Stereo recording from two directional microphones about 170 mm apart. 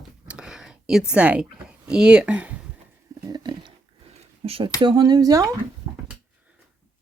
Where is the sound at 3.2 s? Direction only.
25° right (ahead or behind).